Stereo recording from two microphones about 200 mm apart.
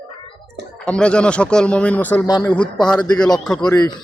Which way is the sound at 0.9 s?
5° left (ahead or behind).